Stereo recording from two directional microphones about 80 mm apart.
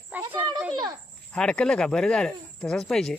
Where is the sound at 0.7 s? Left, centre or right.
Right.